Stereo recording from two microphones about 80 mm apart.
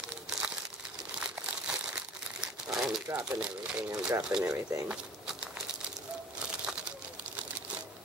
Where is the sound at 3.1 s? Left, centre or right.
Centre.